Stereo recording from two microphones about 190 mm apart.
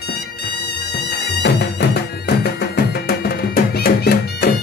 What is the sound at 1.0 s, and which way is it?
Music, 60° left (ahead or behind).